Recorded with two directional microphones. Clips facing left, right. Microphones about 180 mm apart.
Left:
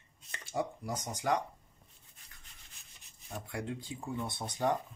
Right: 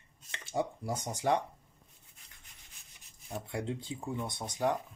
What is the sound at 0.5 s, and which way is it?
Speech, 25° right (ahead or behind).